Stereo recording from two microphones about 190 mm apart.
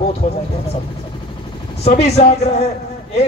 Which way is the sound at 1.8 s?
35° left (ahead or behind).